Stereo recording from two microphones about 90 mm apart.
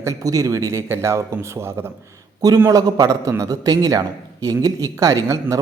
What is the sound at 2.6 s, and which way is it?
A man's voice, 45° right (ahead or behind).